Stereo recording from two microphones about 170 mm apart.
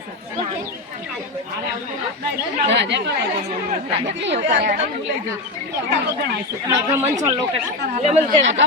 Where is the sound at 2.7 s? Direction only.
90° right.